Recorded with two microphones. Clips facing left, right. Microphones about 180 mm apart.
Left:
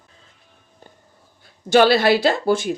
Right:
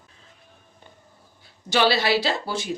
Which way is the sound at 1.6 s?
50° left (ahead or behind).